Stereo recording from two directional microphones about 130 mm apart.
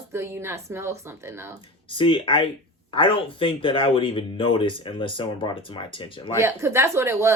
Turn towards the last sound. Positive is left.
turn(degrees=-20)  # may be behind; listen again after turning